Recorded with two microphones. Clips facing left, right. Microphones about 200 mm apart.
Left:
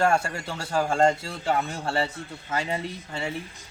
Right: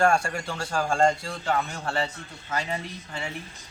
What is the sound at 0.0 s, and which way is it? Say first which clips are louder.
A man's voice: right 1 dB; 20° left (ahead or behind).